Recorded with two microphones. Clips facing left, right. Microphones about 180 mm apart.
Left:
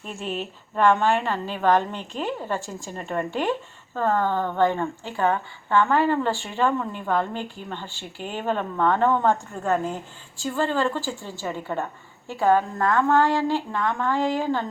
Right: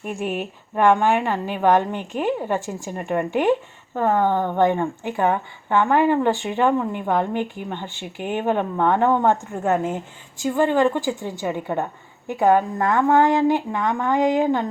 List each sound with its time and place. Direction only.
0.0 s speech: 15° right (ahead or behind)